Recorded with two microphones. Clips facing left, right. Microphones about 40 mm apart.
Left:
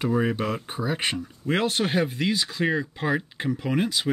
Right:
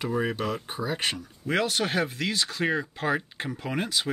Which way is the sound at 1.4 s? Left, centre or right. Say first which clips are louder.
Left 2 dB; left.